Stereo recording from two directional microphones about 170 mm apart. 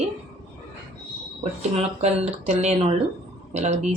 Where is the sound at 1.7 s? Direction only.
40° right (ahead or behind).